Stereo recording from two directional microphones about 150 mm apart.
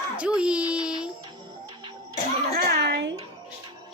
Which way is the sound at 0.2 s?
10° right (ahead or behind).